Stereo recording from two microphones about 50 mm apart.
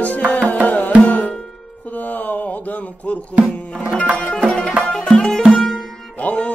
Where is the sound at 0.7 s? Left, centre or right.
Left.